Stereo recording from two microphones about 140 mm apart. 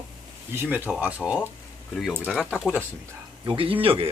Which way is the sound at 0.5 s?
15° right (ahead or behind).